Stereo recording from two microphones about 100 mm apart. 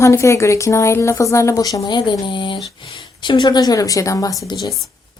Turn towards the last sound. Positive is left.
turn(degrees=35)  # may be behind; listen again after turning